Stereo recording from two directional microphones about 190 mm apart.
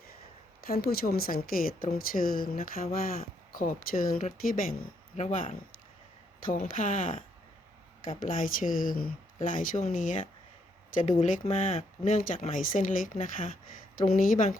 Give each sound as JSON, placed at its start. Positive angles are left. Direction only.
{"t": 0.6, "sound": "speech", "side_deg": 55}
{"t": 8.2, "sound": "speech", "side_deg": 45}